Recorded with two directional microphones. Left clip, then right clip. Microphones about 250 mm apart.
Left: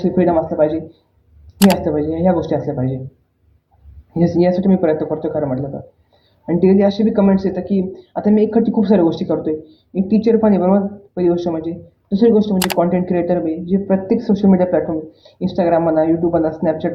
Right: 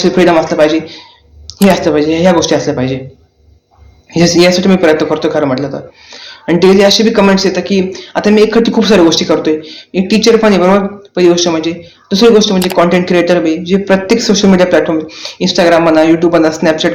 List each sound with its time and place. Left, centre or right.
0.0 s speech: right
1.8 s speech: right
4.1 s speech: right